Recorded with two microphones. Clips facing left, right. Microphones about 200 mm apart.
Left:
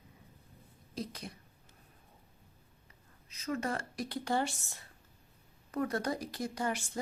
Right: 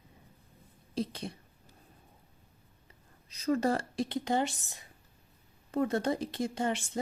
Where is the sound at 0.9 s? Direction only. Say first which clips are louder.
Right 6 dB; 30° right (ahead or behind).